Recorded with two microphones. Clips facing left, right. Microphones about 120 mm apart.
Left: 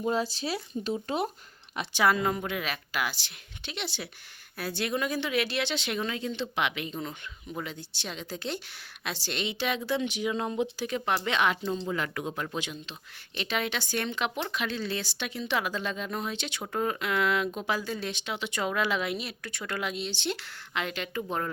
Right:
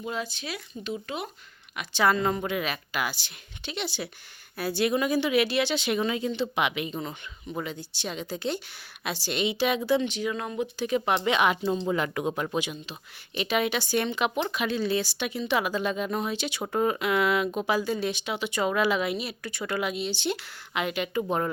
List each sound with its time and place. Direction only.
0.0 s speech: 35° left (ahead or behind)
1.9 s a woman's voice: 10° left (ahead or behind); by 10.0 s 5° right (ahead or behind)
10.0 s speech: 15° left (ahead or behind)
10.3 s speech: 25° left (ahead or behind)
10.8 s a woman's voice: 5° right (ahead or behind)
12.5 s a woman's voice: 10° right (ahead or behind)